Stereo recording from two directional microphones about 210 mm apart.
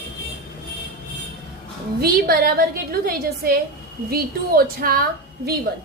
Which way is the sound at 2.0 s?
45° right (ahead or behind).